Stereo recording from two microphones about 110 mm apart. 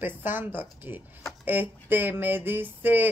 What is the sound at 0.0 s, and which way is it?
Speech, 20° right (ahead or behind).